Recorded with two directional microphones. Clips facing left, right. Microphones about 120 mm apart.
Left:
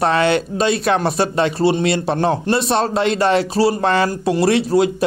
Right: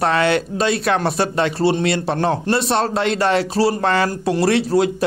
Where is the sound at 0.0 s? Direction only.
20° left (ahead or behind).